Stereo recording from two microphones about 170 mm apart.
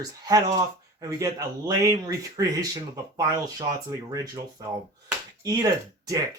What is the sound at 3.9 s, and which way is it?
Speech, 20° right (ahead or behind).